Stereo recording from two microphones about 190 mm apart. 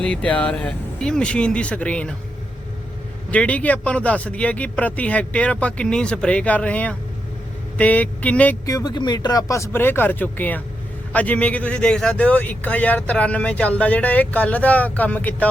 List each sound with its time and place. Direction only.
0.0 s speech: 5° left (ahead or behind)
3.3 s speech: 5° left (ahead or behind)
8.6 s speech: 20° left (ahead or behind)